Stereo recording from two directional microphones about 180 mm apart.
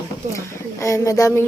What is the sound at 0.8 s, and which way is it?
Speech, 15° left (ahead or behind).